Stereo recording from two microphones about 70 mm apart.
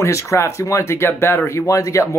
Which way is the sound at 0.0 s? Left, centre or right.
Left.